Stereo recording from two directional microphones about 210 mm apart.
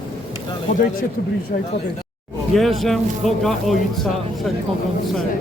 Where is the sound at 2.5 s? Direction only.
Centre (ahead or behind).